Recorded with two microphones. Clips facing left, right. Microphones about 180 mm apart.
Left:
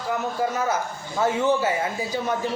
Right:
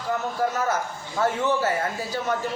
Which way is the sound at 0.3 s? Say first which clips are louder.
Even; 15° left (ahead or behind).